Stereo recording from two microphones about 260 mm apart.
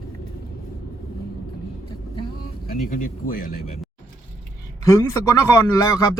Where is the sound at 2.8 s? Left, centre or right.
Left.